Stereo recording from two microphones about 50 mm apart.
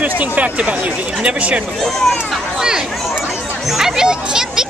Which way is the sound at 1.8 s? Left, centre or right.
Centre.